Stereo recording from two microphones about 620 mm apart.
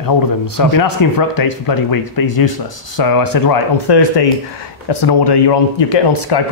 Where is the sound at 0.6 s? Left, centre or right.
Left.